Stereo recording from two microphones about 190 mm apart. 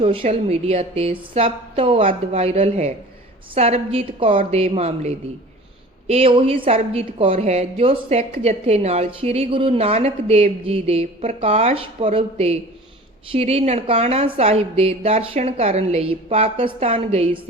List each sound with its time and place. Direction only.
0.0 s a woman's voice: 30° right (ahead or behind)